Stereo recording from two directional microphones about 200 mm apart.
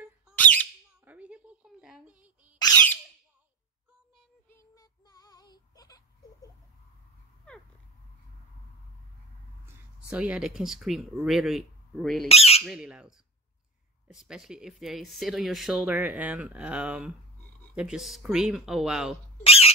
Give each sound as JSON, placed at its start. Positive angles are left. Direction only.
{"t": 0.4, "sound": "bird", "side_deg": 10}
{"t": 1.0, "sound": "a sound", "side_deg": -5}
{"t": 4.5, "sound": "child singing", "side_deg": 15}
{"t": 10.0, "sound": "speech", "side_deg": -5}
{"t": 12.3, "sound": "squawk", "side_deg": 30}
{"t": 12.6, "sound": "speech", "side_deg": -5}
{"t": 19.4, "sound": "rodents", "side_deg": 30}